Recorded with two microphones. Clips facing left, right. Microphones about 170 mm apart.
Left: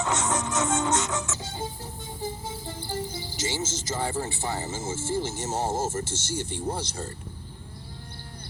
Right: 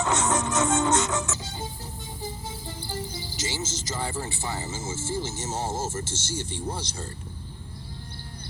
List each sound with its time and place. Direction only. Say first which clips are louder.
0.0 s music: right 2 dB; 60° right (ahead or behind)
1.4 s music: left 2 dB; 55° left (ahead or behind)
4.3 s speech: left 2 dB; 55° left (ahead or behind)